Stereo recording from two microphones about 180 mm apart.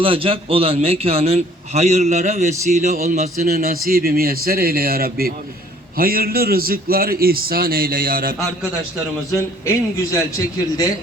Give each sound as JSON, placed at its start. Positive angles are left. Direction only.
{"t": 0.0, "sound": "a man's voice", "side_deg": -30}
{"t": 9.6, "sound": "a man's voice", "side_deg": 15}